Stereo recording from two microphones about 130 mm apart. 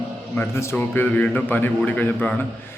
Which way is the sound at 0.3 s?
20° left (ahead or behind).